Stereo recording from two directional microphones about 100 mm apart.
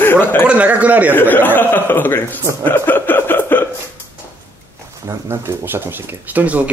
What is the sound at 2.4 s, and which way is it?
Speech, 30° right (ahead or behind).